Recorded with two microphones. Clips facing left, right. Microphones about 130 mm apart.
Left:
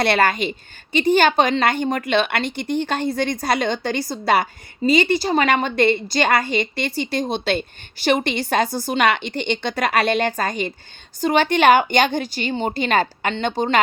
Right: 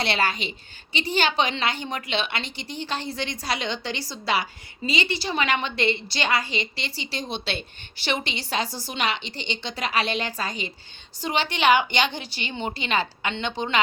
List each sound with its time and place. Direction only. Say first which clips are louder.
0.0 s a woman's voice: left 7 dB; 55° left (ahead or behind)